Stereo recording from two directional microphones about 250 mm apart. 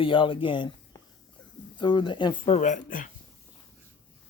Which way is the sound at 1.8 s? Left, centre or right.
Centre.